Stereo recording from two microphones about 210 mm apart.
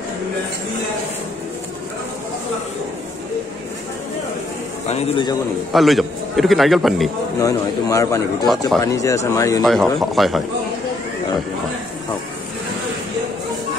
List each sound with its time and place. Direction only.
4.8 s a man's voice: 25° left (ahead or behind)
5.7 s a man's voice: centre (ahead or behind)
7.3 s speech: 15° left (ahead or behind)
8.5 s a man's voice: centre (ahead or behind)
8.8 s speech: 15° left (ahead or behind)
9.6 s a man's voice: centre (ahead or behind)